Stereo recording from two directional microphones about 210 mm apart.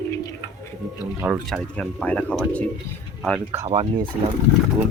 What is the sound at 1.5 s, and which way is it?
Speech, centre (ahead or behind).